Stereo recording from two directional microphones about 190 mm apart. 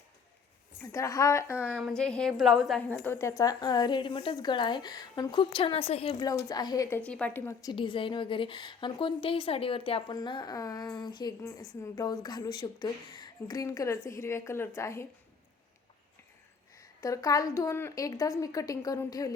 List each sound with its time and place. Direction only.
0.9 s a woman's voice: 15° left (ahead or behind)
1.7 s a woman's voice: 5° left (ahead or behind); by 7.0 s 20° left (ahead or behind)
7.0 s a woman's voice: 5° left (ahead or behind)
16.7 s a woman's voice: 15° left (ahead or behind)